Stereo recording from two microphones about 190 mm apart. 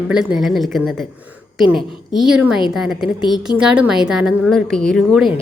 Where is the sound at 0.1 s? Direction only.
5° right (ahead or behind).